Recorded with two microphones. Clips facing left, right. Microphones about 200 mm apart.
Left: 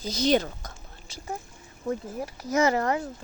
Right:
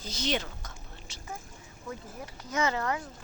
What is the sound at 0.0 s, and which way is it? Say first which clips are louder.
Speech: left 9 dB; 40° left (ahead or behind).